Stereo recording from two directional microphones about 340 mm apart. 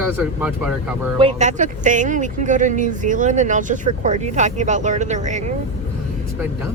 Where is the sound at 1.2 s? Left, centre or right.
Centre.